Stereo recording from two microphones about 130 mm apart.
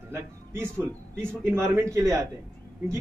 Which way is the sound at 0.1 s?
20° right (ahead or behind).